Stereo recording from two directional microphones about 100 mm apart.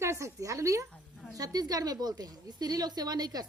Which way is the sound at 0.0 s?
30° right (ahead or behind).